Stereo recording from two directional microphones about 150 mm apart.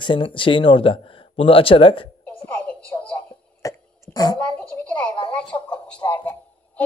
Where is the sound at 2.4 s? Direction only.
10° left (ahead or behind).